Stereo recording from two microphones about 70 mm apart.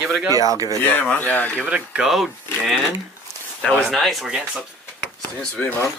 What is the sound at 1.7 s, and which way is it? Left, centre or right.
Speech, centre.